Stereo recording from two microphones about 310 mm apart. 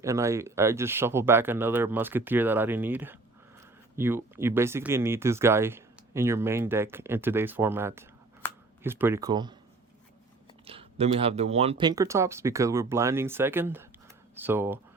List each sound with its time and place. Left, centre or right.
0.0 s speech: centre
10.7 s speech: centre